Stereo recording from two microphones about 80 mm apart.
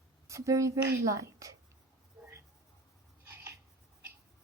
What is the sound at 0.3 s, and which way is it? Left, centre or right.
Speech, right.